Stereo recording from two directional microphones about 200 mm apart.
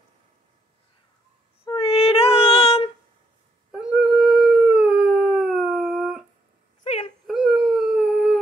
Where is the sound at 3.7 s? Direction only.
5° right (ahead or behind).